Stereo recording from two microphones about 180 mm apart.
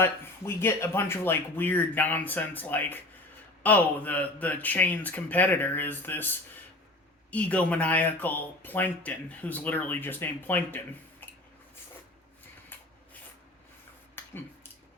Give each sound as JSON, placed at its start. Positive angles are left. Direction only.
{"t": 0.0, "sound": "speech", "side_deg": 15}